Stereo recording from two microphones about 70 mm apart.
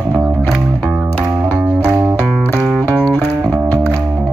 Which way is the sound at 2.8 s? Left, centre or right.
Left.